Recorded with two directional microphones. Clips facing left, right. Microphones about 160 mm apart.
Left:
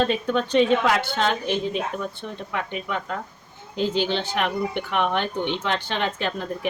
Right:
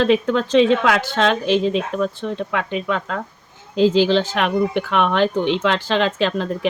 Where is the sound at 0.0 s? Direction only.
90° right.